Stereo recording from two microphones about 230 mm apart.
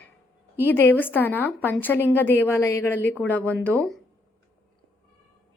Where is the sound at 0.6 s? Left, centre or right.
Centre.